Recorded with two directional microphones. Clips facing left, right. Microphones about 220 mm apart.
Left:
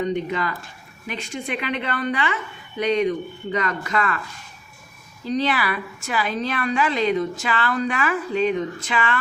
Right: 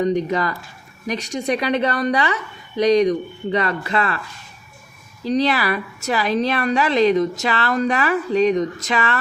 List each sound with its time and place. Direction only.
0.0 s a woman's voice: 40° right (ahead or behind)
5.4 s a woman's voice: 40° right (ahead or behind)